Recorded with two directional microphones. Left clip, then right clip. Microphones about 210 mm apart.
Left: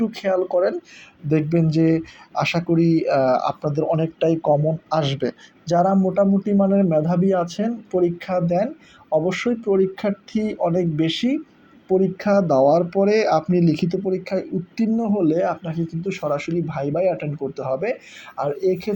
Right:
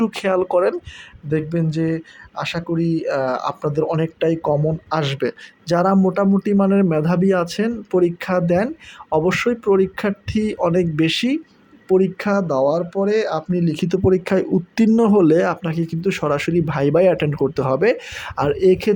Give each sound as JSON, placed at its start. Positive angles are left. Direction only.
{"t": 0.0, "sound": "speech", "side_deg": -30}
{"t": 1.3, "sound": "speech", "side_deg": -5}
{"t": 14.0, "sound": "speech", "side_deg": -35}